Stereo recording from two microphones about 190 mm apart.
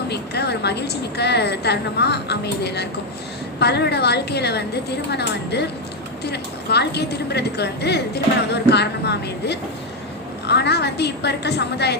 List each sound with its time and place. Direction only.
0.1 s a woman's voice: 60° left (ahead or behind)